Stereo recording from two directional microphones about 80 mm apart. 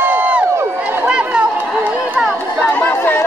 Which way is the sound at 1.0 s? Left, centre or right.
Centre.